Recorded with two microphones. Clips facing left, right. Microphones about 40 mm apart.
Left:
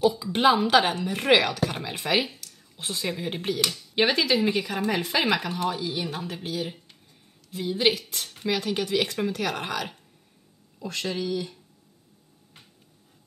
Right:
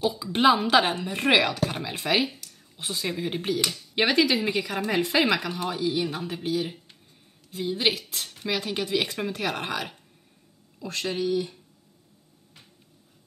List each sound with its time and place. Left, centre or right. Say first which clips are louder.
0.2 s a woman's voice: even; centre
6.1 s speech: right 3 dB; centre
7.5 s speech: left 2 dB; centre
8.5 s a woman's voice: left 2 dB; centre
9.3 s speech: even; right
11.2 s a woman's voice: right 3 dB; centre